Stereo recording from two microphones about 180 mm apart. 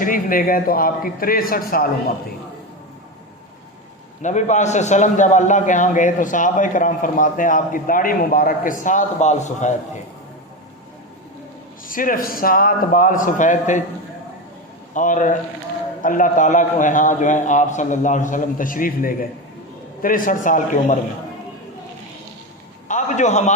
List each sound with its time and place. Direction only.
0.0 s a man's voice: 50° left (ahead or behind)
4.2 s a man's voice: 40° left (ahead or behind)
11.9 s a man's voice: 50° left (ahead or behind)
14.9 s a man's voice: 45° left (ahead or behind)
22.9 s a man's voice: 40° left (ahead or behind)